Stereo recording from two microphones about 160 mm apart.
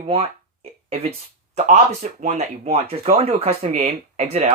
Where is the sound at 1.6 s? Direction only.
45° right (ahead or behind).